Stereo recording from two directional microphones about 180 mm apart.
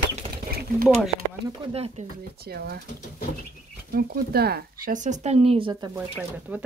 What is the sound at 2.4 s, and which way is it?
Speech, 60° right (ahead or behind).